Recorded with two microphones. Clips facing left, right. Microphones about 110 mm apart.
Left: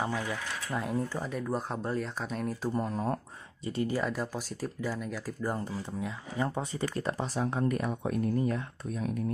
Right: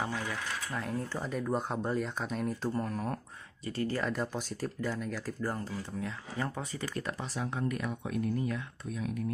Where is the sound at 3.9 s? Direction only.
5° left (ahead or behind); by 9.2 s 40° left (ahead or behind).